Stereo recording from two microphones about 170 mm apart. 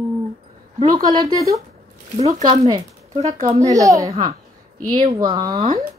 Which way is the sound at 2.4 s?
25° right (ahead or behind).